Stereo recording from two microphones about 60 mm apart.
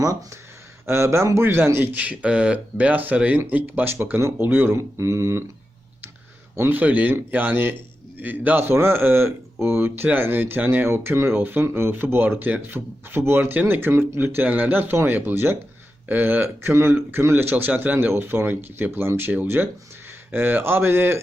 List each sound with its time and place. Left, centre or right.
0.0 s speech: right
0.9 s a man's voice: right
4.8 s mantra: right
6.6 s a man's voice: right
10.8 s a man's voice: right